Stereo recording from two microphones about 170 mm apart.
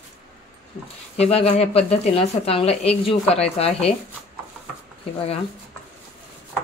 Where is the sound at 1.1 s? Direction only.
40° left (ahead or behind).